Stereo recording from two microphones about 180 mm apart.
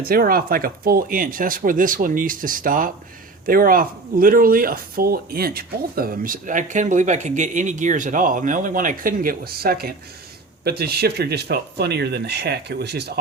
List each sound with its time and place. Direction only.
0.0 s speech: 55° right (ahead or behind)